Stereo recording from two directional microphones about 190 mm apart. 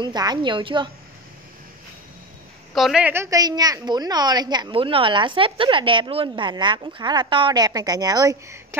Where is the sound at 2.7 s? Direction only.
Centre (ahead or behind).